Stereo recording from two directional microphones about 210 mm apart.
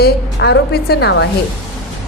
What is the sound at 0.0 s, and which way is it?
A woman's voice, 55° left (ahead or behind).